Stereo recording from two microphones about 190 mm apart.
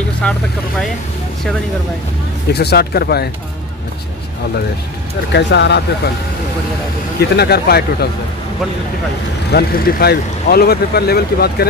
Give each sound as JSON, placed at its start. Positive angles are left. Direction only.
{"t": 0.2, "sound": "speech", "side_deg": 5}
{"t": 2.5, "sound": "speech", "side_deg": 60}
{"t": 5.3, "sound": "speech", "side_deg": 65}
{"t": 7.2, "sound": "speech", "side_deg": 60}
{"t": 9.5, "sound": "speech", "side_deg": 55}